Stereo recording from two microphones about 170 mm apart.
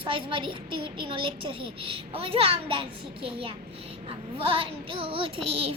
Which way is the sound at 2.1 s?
35° right (ahead or behind).